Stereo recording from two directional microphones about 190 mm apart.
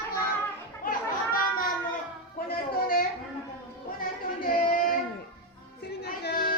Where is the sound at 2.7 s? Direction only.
50° left (ahead or behind).